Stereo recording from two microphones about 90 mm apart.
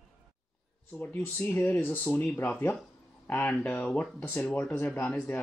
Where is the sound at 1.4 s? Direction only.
20° left (ahead or behind).